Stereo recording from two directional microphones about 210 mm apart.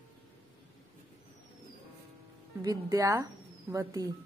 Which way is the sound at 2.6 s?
15° right (ahead or behind).